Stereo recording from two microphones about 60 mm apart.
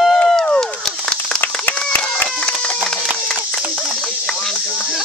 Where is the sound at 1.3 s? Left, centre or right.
Left.